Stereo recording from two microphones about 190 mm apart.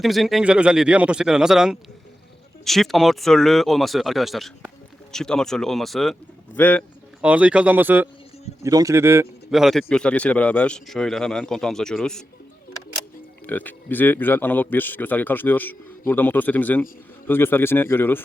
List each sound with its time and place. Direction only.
0.0 s a man's voice: centre (ahead or behind)
7.2 s speech: 5° right (ahead or behind)
9.5 s speech: centre (ahead or behind)
13.5 s a man's voice: 10° left (ahead or behind)